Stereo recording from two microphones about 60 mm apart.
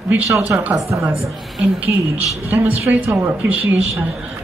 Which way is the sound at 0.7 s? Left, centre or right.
Right.